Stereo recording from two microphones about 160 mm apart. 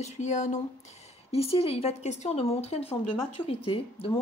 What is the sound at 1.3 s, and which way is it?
Speech, 40° left (ahead or behind).